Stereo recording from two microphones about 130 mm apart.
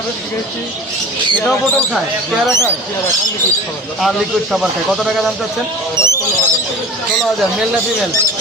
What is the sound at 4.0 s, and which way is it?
A man's voice, centre (ahead or behind).